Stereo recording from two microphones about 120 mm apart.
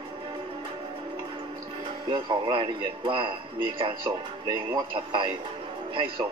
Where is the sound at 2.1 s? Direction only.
45° right (ahead or behind).